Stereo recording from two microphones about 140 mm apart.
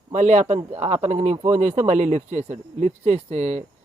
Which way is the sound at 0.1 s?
60° right (ahead or behind).